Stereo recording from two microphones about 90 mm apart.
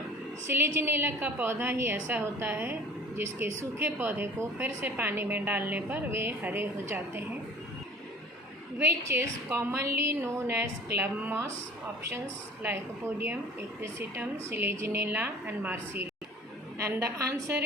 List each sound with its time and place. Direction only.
0.4 s a woman's voice: 25° right (ahead or behind)
8.8 s a woman's voice: 30° right (ahead or behind)
12.6 s a woman's voice: 25° right (ahead or behind)